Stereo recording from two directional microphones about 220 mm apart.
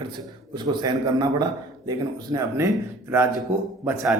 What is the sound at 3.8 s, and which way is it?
Speech, centre (ahead or behind).